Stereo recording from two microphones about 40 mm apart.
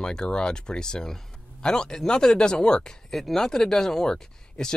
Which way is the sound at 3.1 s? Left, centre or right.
Centre.